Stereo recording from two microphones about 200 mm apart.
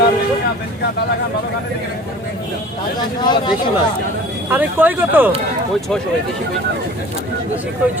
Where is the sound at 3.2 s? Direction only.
20° left (ahead or behind).